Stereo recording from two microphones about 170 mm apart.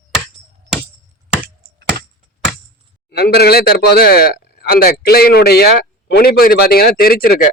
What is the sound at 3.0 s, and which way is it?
Speech, 70° left (ahead or behind).